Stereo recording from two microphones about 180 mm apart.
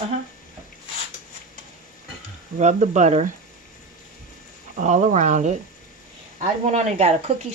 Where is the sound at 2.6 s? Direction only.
40° right (ahead or behind).